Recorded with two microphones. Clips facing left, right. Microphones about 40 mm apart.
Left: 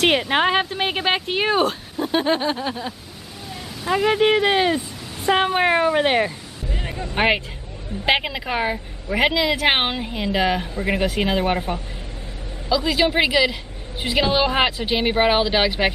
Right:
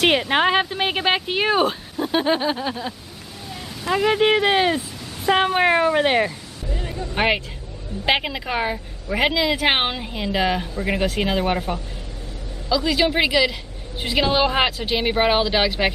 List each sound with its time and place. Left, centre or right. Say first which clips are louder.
0.0 s speech: even; centre
6.7 s a sound: right 1 dB; left
7.2 s speech: left 1 dB; centre